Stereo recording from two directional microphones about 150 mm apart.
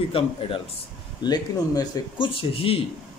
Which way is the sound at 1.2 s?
25° left (ahead or behind).